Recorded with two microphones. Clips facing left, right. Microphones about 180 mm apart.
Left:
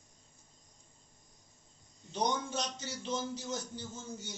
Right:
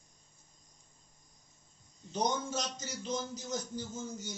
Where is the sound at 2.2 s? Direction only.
40° right (ahead or behind).